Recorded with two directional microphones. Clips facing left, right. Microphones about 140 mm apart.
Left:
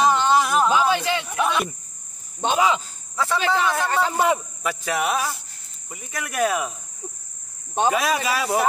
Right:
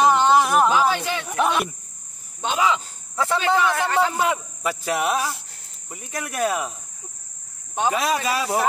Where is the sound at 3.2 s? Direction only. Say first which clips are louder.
Right 1 dB; 20° right (ahead or behind).